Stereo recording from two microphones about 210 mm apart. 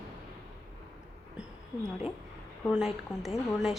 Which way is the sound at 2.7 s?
Centre (ahead or behind).